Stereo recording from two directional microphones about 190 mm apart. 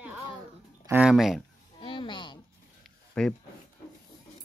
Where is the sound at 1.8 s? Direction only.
25° left (ahead or behind).